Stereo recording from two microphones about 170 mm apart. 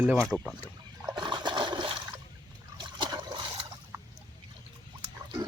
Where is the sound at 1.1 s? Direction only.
25° right (ahead or behind).